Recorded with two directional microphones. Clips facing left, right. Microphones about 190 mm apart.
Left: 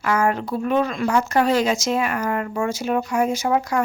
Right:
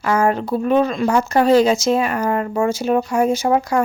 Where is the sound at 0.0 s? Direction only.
30° right (ahead or behind).